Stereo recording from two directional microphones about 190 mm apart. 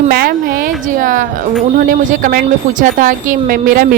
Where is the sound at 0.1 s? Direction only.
55° right (ahead or behind).